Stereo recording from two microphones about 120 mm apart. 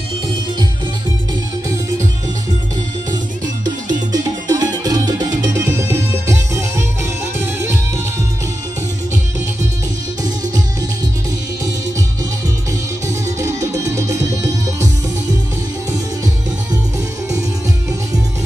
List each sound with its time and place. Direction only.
3.6 s music: 35° right (ahead or behind)
13.1 s music: 25° right (ahead or behind)